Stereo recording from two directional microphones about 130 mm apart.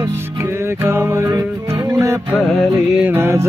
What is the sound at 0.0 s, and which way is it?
Music, 20° right (ahead or behind).